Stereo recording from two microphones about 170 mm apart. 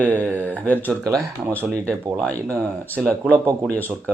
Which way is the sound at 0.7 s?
10° left (ahead or behind).